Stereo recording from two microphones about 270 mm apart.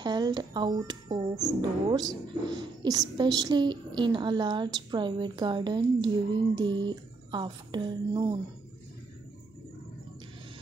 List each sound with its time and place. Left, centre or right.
0.0 s speech: centre